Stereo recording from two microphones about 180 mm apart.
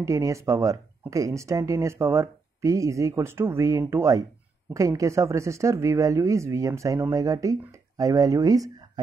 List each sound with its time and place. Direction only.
0.0 s speech: 15° right (ahead or behind)